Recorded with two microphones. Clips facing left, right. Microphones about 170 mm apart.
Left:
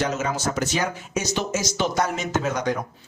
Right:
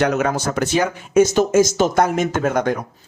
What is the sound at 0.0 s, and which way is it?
Speech, 60° right (ahead or behind).